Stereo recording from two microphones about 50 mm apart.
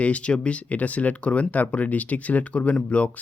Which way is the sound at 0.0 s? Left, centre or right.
Left.